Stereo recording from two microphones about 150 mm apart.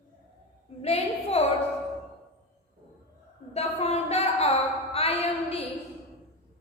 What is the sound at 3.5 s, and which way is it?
A woman's voice, 45° left (ahead or behind).